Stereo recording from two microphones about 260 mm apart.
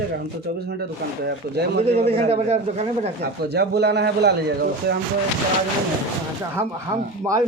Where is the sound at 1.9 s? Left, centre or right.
Right.